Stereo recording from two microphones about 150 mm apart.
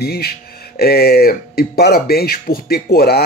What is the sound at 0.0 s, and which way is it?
Speech, 90° left.